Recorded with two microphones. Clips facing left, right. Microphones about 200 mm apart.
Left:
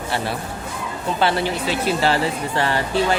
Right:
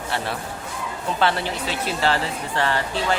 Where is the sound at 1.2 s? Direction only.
5° left (ahead or behind).